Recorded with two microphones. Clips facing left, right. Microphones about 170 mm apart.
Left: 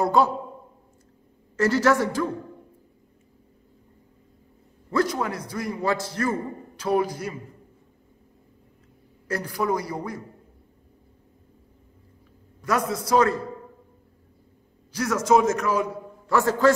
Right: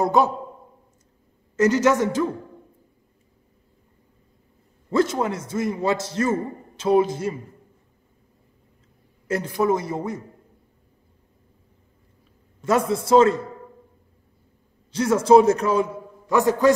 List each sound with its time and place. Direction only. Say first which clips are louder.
0.0 s a man's voice: right 1 dB; 20° right (ahead or behind)
1.6 s a man's voice: right 2 dB; 20° right (ahead or behind)
4.9 s a man's voice: right 3 dB; 25° right (ahead or behind)
9.3 s a man's voice: right 4 dB; 25° right (ahead or behind)
12.6 s a man's voice: right 4 dB; 25° right (ahead or behind)
14.9 s a man's voice: right 5 dB; 25° right (ahead or behind)
16.3 s a man's voice: right 2 dB; 15° right (ahead or behind)